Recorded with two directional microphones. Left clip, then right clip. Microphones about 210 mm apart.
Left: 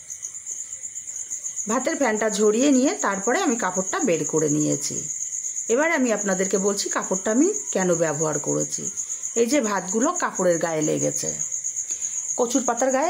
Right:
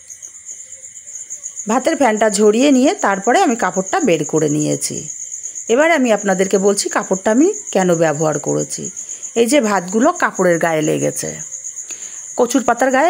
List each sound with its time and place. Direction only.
1.7 s speech: 30° right (ahead or behind)
12.4 s cricket: 30° right (ahead or behind)